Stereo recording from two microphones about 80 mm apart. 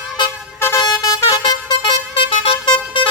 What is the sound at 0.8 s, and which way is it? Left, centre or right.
Vehicle horn, left.